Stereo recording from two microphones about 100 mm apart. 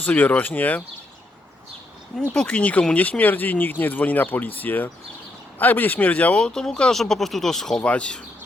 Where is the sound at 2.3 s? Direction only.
10° left (ahead or behind).